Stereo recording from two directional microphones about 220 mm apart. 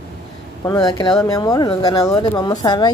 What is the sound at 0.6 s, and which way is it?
A woman's voice, 15° left (ahead or behind).